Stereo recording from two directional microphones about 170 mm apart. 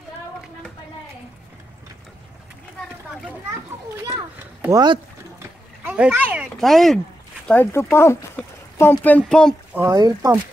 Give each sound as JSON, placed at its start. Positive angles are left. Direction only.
{"t": 4.1, "sound": "a sound", "side_deg": -20}
{"t": 5.9, "sound": "speech", "side_deg": -10}
{"t": 7.4, "sound": "speech", "side_deg": 10}
{"t": 9.8, "sound": "speech", "side_deg": -20}